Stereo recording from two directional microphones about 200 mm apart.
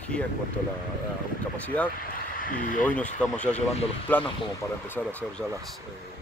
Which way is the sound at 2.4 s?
40° left (ahead or behind).